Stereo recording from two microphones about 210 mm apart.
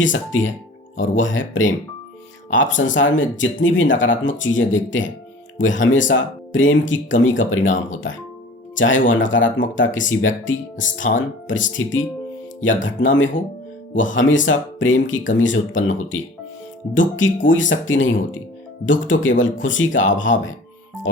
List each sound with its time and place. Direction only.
0.0 s speech: 65° left (ahead or behind)
8.8 s speech: 65° left (ahead or behind)